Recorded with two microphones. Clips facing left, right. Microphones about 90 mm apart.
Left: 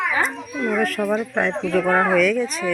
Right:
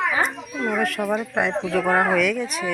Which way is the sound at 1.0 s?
10° right (ahead or behind).